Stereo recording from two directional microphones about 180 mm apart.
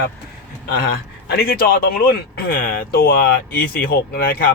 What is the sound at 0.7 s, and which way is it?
Speech, 60° left (ahead or behind).